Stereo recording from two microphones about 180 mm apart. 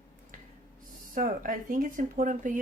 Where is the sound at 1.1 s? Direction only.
50° right (ahead or behind).